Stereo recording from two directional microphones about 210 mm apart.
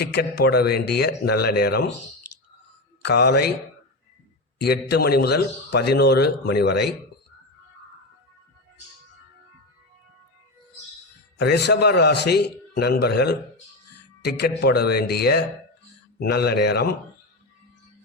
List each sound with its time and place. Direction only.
0.0 s a man's voice: 50° left (ahead or behind)
3.0 s a man's voice: 50° left (ahead or behind)
4.6 s a man's voice: 50° left (ahead or behind)
11.3 s a man's voice: 50° left (ahead or behind)